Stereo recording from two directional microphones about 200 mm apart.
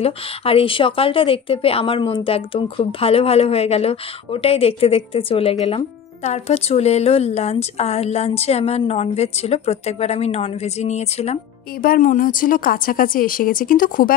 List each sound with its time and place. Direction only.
0.0 s a woman's voice: 30° left (ahead or behind)